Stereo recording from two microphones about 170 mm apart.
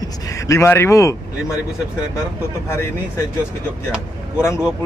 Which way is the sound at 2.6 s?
15° left (ahead or behind).